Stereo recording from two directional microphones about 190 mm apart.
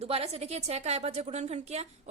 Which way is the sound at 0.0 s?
30° right (ahead or behind).